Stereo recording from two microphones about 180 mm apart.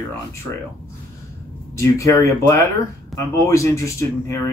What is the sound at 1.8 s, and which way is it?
A man's voice, 15° left (ahead or behind).